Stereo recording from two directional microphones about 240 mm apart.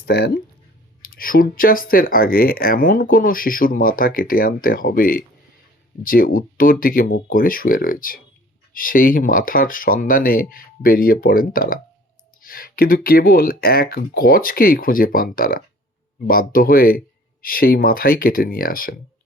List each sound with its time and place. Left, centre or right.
0.0 s speech: left